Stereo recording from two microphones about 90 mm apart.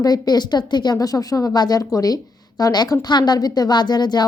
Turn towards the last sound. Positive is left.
turn(degrees=50)  # may be behind; listen again after turning